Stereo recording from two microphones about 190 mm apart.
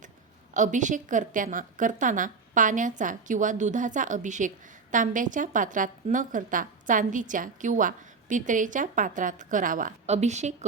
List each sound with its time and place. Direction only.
0.5 s a woman's voice: 40° right (ahead or behind)